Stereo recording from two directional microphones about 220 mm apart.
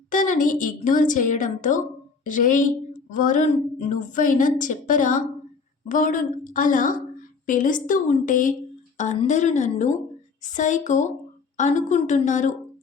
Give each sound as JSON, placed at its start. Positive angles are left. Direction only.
{"t": 0.1, "sound": "speech", "side_deg": 35}